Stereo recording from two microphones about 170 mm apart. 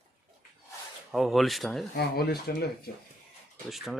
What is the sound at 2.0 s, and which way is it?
Speech, 70° left (ahead or behind).